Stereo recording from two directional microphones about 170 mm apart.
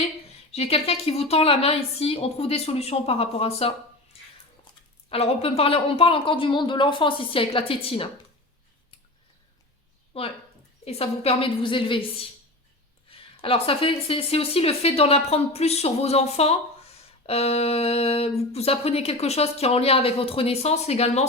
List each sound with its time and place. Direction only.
0.5 s speech: 35° left (ahead or behind)
5.0 s speech: 35° left (ahead or behind)
10.1 s speech: 35° left (ahead or behind)
13.1 s speech: 30° left (ahead or behind)